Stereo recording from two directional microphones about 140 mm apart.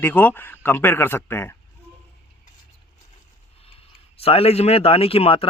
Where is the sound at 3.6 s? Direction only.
45° left (ahead or behind).